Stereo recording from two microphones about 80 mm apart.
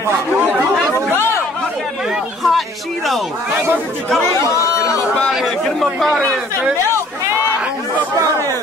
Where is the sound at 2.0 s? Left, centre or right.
Centre.